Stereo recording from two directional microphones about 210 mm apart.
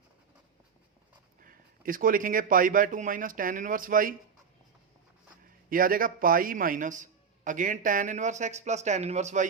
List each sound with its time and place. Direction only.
1.4 s a man's voice: 40° right (ahead or behind)
5.6 s a man's voice: 40° right (ahead or behind)